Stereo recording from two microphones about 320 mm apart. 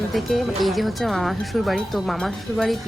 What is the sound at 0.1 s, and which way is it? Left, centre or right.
Speech, centre.